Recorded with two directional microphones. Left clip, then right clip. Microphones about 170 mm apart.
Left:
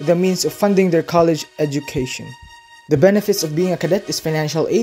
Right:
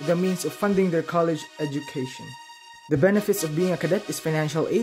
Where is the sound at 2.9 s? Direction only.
15° left (ahead or behind).